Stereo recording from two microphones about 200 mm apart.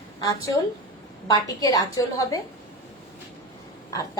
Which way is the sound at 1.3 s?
20° left (ahead or behind).